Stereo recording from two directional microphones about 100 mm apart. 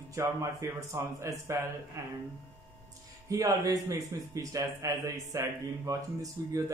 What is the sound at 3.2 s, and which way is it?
Speech, 35° right (ahead or behind).